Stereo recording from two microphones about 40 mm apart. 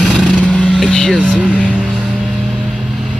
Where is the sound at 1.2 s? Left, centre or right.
Right.